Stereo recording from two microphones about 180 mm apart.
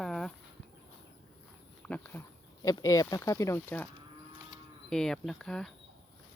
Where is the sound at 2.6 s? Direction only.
20° left (ahead or behind).